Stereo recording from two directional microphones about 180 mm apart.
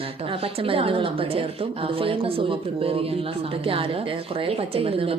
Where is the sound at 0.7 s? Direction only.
30° right (ahead or behind).